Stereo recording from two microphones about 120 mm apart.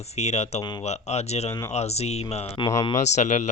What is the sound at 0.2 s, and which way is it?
Speech, 65° left (ahead or behind).